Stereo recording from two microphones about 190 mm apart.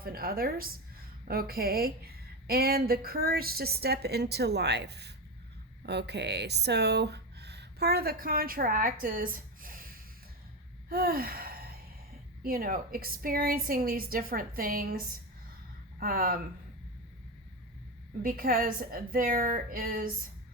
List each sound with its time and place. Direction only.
0.0 s a woman's voice: 50° right (ahead or behind)
10.8 s gasp: 50° right (ahead or behind)
12.4 s a woman's voice: 50° right (ahead or behind)
18.2 s a woman's voice: 50° right (ahead or behind)